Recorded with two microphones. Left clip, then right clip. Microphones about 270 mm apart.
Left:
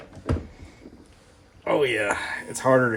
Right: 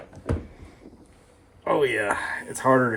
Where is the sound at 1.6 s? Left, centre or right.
Centre.